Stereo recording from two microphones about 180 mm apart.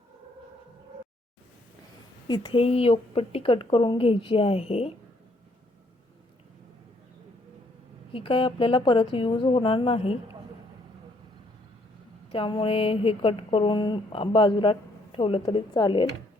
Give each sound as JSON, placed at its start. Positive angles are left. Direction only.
{"t": 2.2, "sound": "speech", "side_deg": 25}
{"t": 8.1, "sound": "speech", "side_deg": 30}
{"t": 12.3, "sound": "speech", "side_deg": 30}